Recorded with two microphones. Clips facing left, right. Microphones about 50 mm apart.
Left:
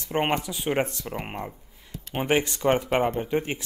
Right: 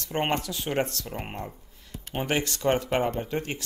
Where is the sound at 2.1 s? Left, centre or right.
Centre.